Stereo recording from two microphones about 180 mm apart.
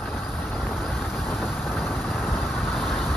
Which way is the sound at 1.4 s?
Centre (ahead or behind).